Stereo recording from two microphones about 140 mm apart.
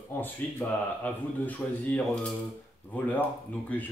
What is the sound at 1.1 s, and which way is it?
A man's voice, 10° left (ahead or behind).